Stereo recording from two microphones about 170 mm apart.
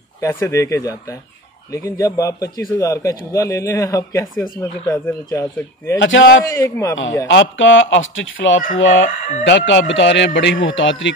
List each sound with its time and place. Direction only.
0.2 s a man's voice: 15° left (ahead or behind)
5.9 s speech: 90° left
6.5 s a man's voice: 15° left (ahead or behind)
7.2 s speech: 90° left